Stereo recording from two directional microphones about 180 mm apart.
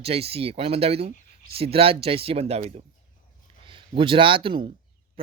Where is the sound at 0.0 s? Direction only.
35° right (ahead or behind).